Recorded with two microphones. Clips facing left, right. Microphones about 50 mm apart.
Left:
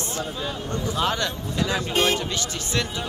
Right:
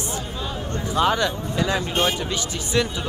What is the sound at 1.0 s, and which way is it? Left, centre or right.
Speech, centre.